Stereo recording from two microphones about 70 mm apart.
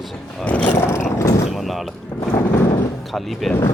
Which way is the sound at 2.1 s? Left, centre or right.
Left.